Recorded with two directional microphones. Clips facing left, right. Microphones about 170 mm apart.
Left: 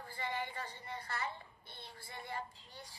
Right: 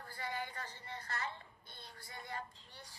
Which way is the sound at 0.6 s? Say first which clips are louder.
Left 3 dB; 30° left (ahead or behind).